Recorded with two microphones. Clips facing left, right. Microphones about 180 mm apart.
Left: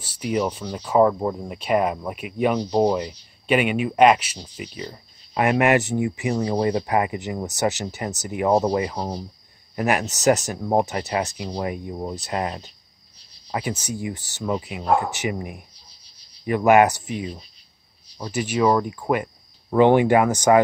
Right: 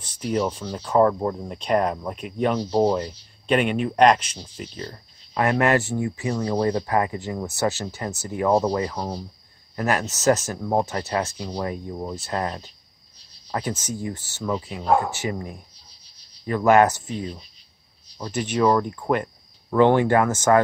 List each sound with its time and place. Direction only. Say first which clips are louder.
0.0 s speech: left 1 dB; 5° left (ahead or behind)